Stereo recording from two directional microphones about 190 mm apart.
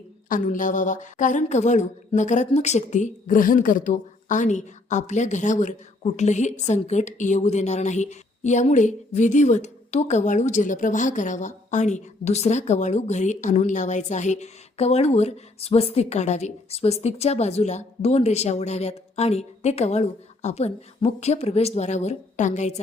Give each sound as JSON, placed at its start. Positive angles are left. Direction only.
{"t": 0.3, "sound": "a woman's voice", "side_deg": 45}